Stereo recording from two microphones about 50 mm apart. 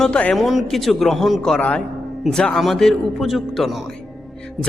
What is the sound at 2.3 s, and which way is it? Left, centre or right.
A man's voice, centre.